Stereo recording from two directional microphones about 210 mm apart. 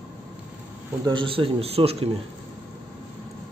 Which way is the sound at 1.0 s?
25° right (ahead or behind).